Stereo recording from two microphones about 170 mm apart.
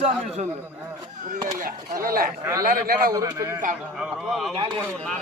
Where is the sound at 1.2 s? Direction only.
50° right (ahead or behind).